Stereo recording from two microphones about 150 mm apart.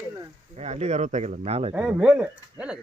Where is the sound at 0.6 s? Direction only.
45° right (ahead or behind).